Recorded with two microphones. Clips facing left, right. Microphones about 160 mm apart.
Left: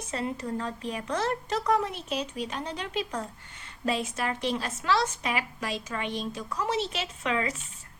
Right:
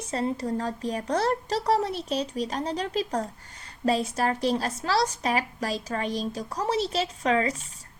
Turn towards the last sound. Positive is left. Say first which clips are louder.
# right 5 dB
turn(degrees=-35)  # may be behind; listen again after turning